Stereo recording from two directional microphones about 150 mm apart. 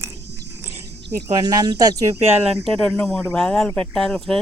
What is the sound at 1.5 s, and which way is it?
Speech, 25° right (ahead or behind).